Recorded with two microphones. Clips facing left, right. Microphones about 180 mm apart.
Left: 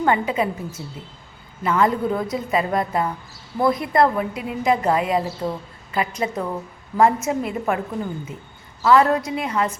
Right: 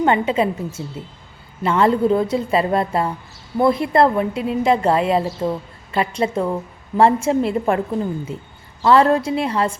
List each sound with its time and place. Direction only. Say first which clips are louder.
0.0 s a woman's voice: right 3 dB; 25° right (ahead or behind)
8.8 s a woman's voice: right 2 dB; 30° right (ahead or behind)